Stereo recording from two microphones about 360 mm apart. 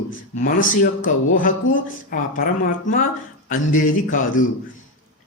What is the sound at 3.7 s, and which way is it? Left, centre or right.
Speech, left.